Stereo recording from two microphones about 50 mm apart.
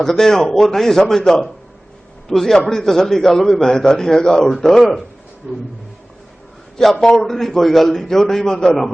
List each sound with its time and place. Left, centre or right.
0.0 s a man's voice: centre
7.0 s a man's voice: centre